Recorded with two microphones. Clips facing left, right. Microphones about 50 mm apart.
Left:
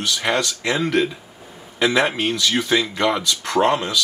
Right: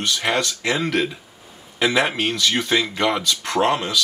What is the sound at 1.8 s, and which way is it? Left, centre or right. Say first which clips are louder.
Speech: left 1 dB; centre.